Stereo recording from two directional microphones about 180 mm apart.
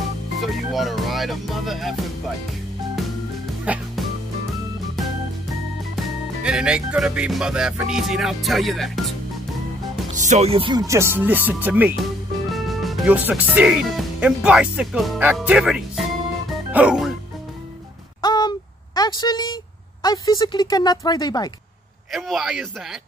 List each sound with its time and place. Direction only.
0.4 s speech: centre (ahead or behind)
3.6 s music: 5° right (ahead or behind)
5.9 s music: 5° right (ahead or behind)
10.1 s speech: 40° right (ahead or behind); by 15.3 s 5° right (ahead or behind)
15.3 s music: 5° right (ahead or behind)
16.7 s speech: 5° right (ahead or behind)
18.2 s a sound: 25° left (ahead or behind)
22.1 s music: centre (ahead or behind)